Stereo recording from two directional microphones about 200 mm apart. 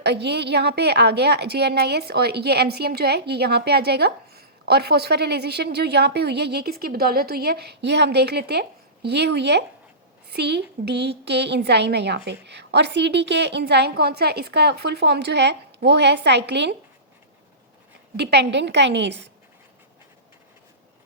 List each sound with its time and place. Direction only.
0.0 s a woman's voice: 55° right (ahead or behind)
18.2 s a woman's voice: 55° right (ahead or behind)